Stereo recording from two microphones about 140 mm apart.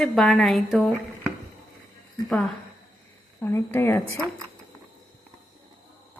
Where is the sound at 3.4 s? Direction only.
15° left (ahead or behind).